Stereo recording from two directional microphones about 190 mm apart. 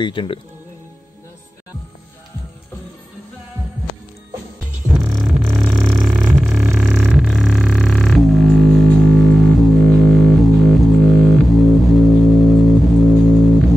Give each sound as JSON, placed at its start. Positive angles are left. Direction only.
{"t": 0.0, "sound": "speech", "side_deg": 25}
{"t": 4.9, "sound": "music", "side_deg": 0}